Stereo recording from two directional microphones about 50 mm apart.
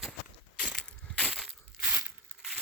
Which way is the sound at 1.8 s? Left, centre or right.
Right.